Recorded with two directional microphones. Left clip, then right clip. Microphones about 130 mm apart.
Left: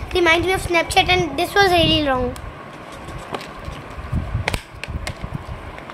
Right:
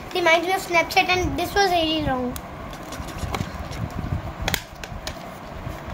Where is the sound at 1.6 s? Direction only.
60° left (ahead or behind).